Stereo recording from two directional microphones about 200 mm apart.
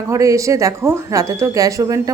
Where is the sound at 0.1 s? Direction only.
15° right (ahead or behind).